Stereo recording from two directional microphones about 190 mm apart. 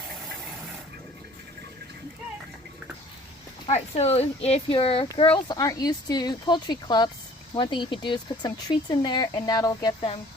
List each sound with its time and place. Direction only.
3.7 s speech: 35° left (ahead or behind)